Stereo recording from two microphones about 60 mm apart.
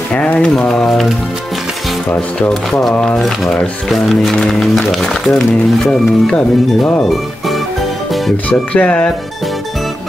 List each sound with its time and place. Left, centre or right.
0.4 s speech: centre
0.8 s speech: centre
2.5 s speech: centre
5.9 s speech: centre
8.5 s speech: centre